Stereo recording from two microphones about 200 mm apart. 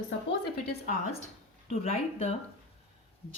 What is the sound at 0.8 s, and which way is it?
A woman's voice, 40° left (ahead or behind).